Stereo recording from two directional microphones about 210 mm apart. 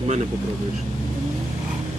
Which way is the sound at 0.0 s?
35° right (ahead or behind).